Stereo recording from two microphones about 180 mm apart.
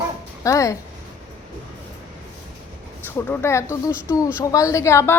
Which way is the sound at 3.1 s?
15° left (ahead or behind).